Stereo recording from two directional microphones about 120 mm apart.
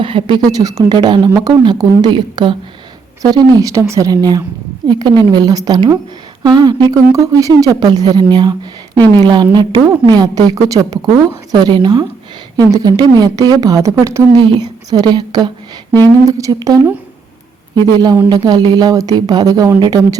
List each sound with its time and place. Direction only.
0.0 s speech: 45° right (ahead or behind)
3.2 s a woman's voice: 30° right (ahead or behind)
14.5 s speech: 35° right (ahead or behind)